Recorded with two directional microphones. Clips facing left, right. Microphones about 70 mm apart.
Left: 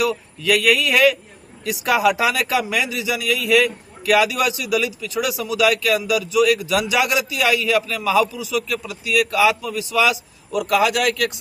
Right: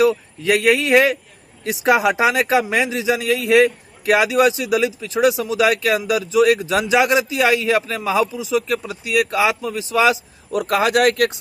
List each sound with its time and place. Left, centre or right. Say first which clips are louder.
0.0 s a man's voice: right 5 dB; right